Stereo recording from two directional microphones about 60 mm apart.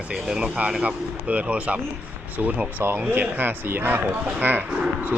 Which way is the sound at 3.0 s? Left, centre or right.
Right.